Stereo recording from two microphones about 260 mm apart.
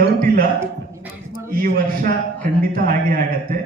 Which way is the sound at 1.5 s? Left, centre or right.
Right.